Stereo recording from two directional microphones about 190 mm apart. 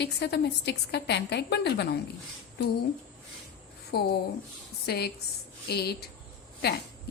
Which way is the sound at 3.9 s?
55° left (ahead or behind).